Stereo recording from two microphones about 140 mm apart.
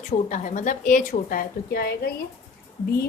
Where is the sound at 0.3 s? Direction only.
65° left (ahead or behind).